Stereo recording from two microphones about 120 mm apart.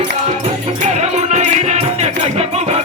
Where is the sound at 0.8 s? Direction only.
70° right (ahead or behind).